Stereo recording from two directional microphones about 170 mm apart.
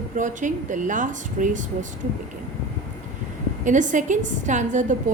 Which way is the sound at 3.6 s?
45° right (ahead or behind).